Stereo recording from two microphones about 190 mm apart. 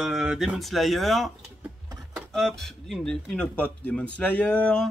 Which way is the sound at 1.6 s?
15° right (ahead or behind).